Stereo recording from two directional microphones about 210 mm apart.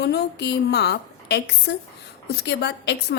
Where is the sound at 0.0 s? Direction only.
50° left (ahead or behind).